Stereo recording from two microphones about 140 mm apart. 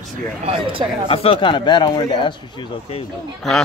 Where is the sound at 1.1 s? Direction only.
40° left (ahead or behind).